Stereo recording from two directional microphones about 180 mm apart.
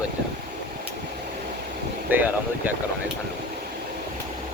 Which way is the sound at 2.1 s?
10° right (ahead or behind).